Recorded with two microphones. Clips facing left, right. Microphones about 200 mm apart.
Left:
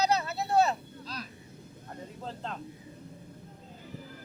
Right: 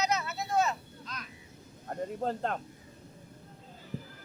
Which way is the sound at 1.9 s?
55° right (ahead or behind).